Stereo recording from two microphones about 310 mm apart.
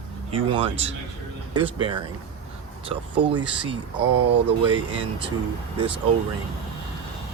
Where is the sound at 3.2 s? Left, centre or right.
Centre.